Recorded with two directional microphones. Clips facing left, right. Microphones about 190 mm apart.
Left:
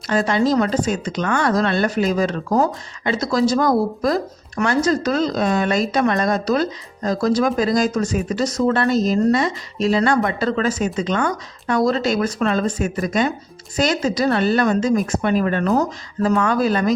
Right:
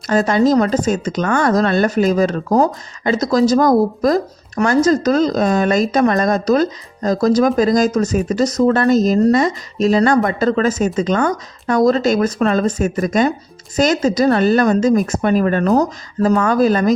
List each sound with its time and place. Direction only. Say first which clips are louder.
0.1 s a woman's voice: right 4 dB; 45° right (ahead or behind)